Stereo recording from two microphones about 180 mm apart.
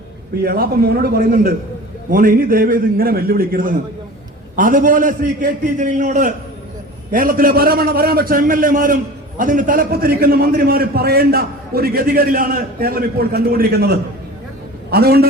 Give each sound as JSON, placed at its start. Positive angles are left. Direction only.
{"t": 0.4, "sound": "a man's voice", "side_deg": -55}